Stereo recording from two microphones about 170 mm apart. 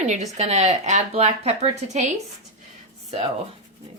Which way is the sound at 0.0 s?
45° right (ahead or behind).